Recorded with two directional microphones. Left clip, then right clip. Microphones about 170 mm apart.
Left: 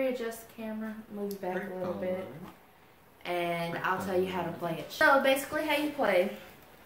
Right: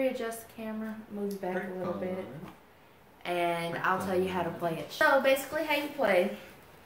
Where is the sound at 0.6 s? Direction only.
20° right (ahead or behind).